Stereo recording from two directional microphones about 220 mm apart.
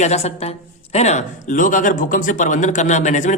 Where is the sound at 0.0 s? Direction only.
30° left (ahead or behind).